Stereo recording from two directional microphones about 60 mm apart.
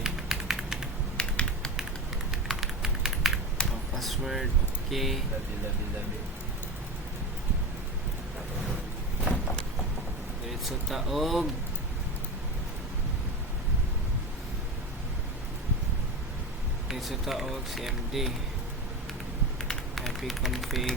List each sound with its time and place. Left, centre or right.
0.0 s typing: centre
1.1 s typing: centre
2.3 s typing: centre
3.6 s a sound: centre
3.9 s vehicle: centre
4.9 s speech: centre
10.7 s speech: centre
16.9 s speech: centre
19.6 s a sound: centre